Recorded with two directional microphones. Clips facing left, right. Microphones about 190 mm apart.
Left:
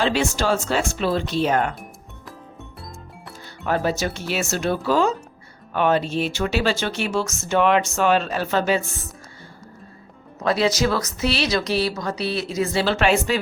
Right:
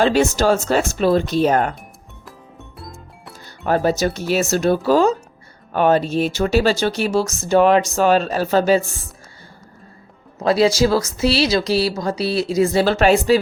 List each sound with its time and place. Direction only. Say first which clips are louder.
0.0 s speech: right 6 dB; 45° right (ahead or behind)
2.8 s music: right 1 dB; centre (ahead or behind)
3.7 s speech: right 5 dB; 40° right (ahead or behind)
10.4 s speech: right 5 dB; 35° right (ahead or behind)